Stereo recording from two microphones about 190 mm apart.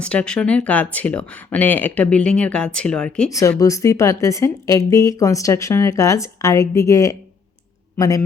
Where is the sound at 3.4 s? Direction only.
15° left (ahead or behind).